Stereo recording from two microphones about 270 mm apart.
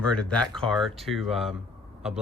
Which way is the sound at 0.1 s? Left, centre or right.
Centre.